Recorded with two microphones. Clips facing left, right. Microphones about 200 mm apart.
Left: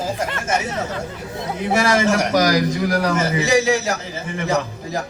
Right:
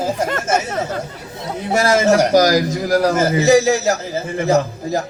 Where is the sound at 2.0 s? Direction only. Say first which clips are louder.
Right 5 dB; 35° right (ahead or behind).